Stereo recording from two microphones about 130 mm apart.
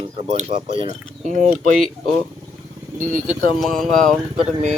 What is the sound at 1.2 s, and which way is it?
Mechanisms, 65° right (ahead or behind).